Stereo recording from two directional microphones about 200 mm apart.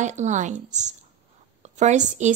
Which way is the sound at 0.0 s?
35° right (ahead or behind).